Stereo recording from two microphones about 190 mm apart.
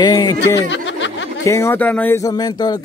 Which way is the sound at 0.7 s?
75° left (ahead or behind).